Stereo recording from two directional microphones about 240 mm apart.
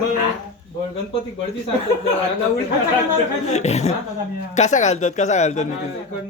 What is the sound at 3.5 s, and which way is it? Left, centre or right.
Speech, left.